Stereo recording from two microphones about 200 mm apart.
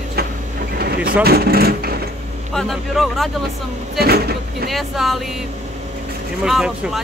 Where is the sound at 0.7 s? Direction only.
50° right (ahead or behind).